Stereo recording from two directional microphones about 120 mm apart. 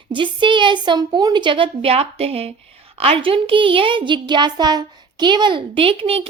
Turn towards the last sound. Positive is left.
turn(degrees=-50)  # may be behind; listen again after turning